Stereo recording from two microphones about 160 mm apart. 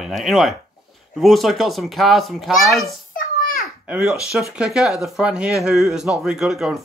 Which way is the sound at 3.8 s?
5° right (ahead or behind).